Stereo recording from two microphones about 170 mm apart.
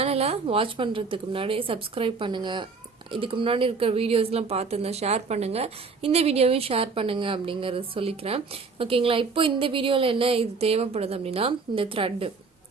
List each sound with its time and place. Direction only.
0.0 s speech: 35° right (ahead or behind)